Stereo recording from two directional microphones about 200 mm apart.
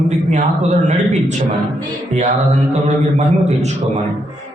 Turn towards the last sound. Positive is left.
turn(degrees=-35)  # may be behind; listen again after turning